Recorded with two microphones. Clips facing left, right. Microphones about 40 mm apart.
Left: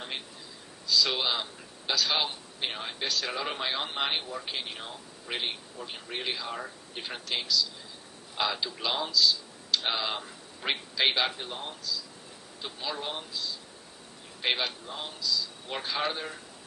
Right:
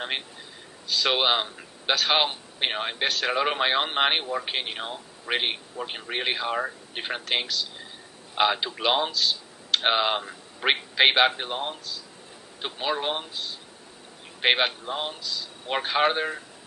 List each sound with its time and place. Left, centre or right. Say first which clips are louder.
0.9 s a man's voice: right 4 dB; right